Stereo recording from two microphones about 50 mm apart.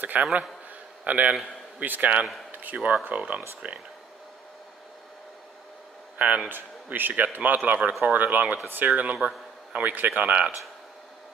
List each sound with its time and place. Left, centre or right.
0.0 s a man's voice: right
2.5 s a sound: right
3.1 s a man's voice: right
6.1 s a man's voice: right